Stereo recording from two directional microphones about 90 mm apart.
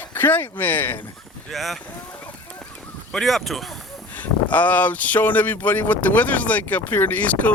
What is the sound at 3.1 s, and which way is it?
Speech, centre (ahead or behind).